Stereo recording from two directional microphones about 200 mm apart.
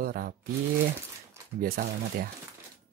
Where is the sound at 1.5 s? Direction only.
45° right (ahead or behind).